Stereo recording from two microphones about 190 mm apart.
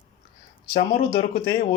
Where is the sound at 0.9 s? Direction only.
55° left (ahead or behind).